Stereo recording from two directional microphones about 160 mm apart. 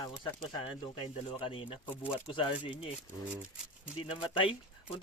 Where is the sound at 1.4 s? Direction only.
35° left (ahead or behind).